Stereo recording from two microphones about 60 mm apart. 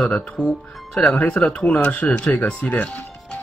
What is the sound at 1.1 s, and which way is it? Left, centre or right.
Speech, centre.